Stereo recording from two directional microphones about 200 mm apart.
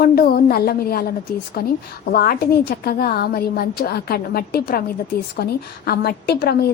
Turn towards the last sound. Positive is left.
turn(degrees=50)  # may be behind; listen again after turning